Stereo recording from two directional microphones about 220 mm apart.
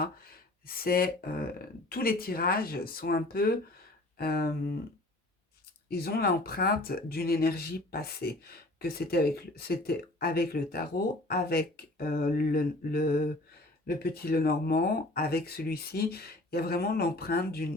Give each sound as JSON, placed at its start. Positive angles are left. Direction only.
{"t": 0.0, "sound": "speech", "side_deg": 45}
{"t": 5.9, "sound": "speech", "side_deg": 45}